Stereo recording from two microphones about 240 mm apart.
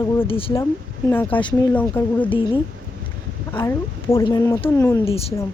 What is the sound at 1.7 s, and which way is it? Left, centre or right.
Speech, centre.